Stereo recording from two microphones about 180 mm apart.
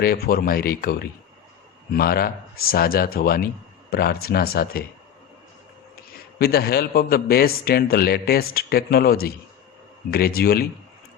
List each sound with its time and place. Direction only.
0.0 s a man's voice: 60° left (ahead or behind)
6.1 s a man's voice: 60° left (ahead or behind)